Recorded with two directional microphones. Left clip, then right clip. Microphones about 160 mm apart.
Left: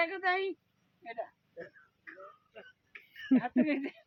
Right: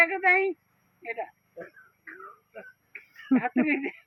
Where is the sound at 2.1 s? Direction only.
5° left (ahead or behind).